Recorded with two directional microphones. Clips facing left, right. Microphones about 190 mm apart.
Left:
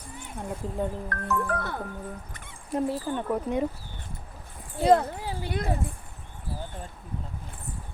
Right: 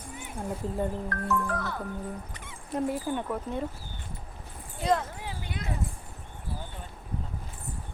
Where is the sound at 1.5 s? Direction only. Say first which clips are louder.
Left 2 dB; 55° left (ahead or behind).